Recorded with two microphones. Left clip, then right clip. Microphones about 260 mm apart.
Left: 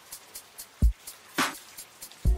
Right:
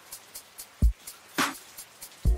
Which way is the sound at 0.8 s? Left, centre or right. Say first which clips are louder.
Even; centre.